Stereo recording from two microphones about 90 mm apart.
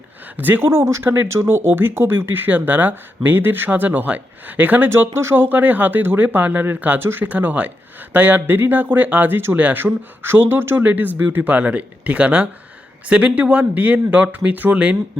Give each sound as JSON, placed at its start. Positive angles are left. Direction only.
{"t": 0.3, "sound": "speech", "side_deg": -20}
{"t": 4.9, "sound": "speech", "side_deg": -30}